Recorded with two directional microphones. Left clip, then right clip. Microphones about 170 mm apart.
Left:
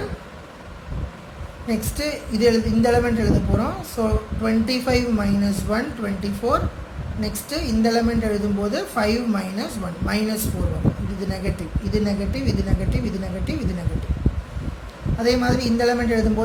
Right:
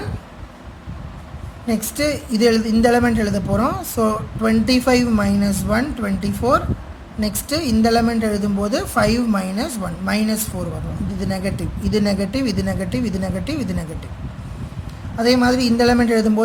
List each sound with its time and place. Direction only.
1.6 s a woman's voice: 35° right (ahead or behind)
15.2 s a woman's voice: 40° right (ahead or behind)